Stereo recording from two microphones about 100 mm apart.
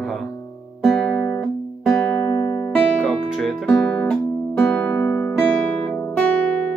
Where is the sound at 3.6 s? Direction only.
10° left (ahead or behind).